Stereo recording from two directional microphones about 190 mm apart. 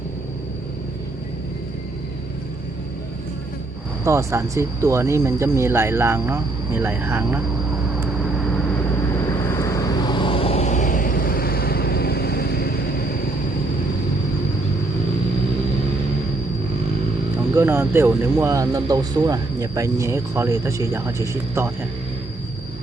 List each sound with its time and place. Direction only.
4.0 s speech: 15° right (ahead or behind)
9.5 s vehicle: 15° left (ahead or behind); by 12.8 s 55° left (ahead or behind)
17.5 s speech: 15° right (ahead or behind)